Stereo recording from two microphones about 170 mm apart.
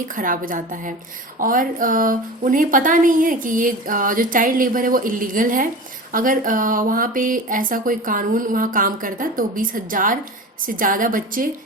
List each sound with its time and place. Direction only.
0.2 s speech: 55° right (ahead or behind)